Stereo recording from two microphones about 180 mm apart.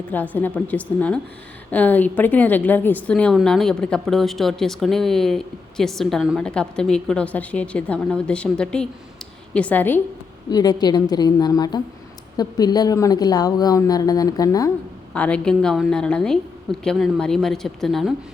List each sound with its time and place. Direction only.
0.1 s a woman's voice: 10° left (ahead or behind)
10.5 s a woman's voice: 20° left (ahead or behind)
15.1 s a woman's voice: 5° left (ahead or behind)